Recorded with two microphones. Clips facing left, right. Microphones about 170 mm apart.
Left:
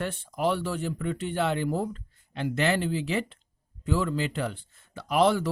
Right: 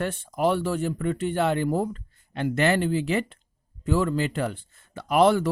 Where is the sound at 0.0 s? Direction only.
45° right (ahead or behind).